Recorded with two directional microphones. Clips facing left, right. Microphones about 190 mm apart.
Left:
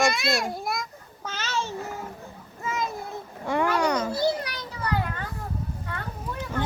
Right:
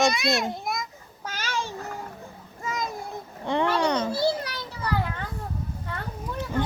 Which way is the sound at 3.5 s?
20° right (ahead or behind).